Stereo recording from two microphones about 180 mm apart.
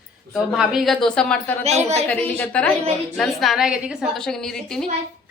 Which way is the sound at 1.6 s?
35° right (ahead or behind).